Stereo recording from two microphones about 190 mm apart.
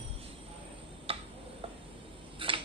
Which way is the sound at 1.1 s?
30° right (ahead or behind).